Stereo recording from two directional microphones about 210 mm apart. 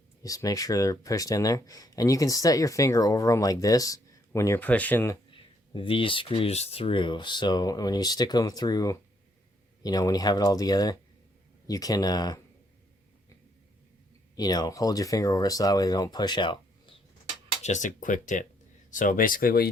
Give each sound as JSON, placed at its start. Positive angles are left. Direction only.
{"t": 0.2, "sound": "speech", "side_deg": 15}
{"t": 5.3, "sound": "speech", "side_deg": 25}
{"t": 14.3, "sound": "speech", "side_deg": 20}
{"t": 17.6, "sound": "speech", "side_deg": 35}